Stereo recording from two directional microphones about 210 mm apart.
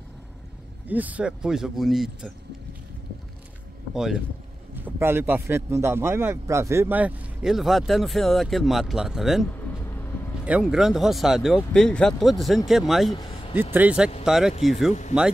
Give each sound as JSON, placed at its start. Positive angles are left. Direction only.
{"t": 0.8, "sound": "speech", "side_deg": -10}
{"t": 3.9, "sound": "a man's voice", "side_deg": 0}
{"t": 13.1, "sound": "a sound", "side_deg": 20}
{"t": 13.6, "sound": "a man's voice", "side_deg": -10}